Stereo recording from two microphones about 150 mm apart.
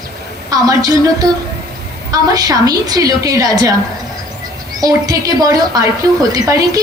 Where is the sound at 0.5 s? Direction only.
25° right (ahead or behind).